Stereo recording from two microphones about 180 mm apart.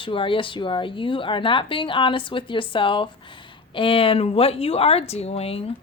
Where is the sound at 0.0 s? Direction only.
30° left (ahead or behind).